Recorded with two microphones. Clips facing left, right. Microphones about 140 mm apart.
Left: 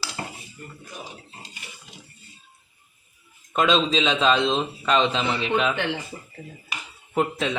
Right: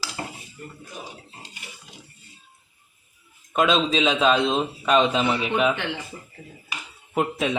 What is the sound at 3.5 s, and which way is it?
A man's voice, 5° right (ahead or behind).